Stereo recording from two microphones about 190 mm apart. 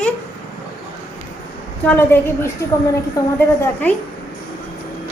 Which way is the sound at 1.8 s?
10° left (ahead or behind).